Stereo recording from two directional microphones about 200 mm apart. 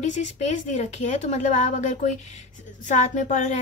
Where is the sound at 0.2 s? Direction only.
35° left (ahead or behind).